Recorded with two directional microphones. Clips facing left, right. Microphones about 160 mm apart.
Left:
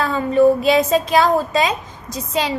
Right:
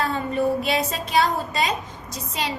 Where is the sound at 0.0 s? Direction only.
90° left.